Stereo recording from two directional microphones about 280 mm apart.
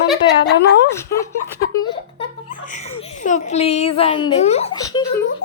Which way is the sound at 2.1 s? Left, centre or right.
Left.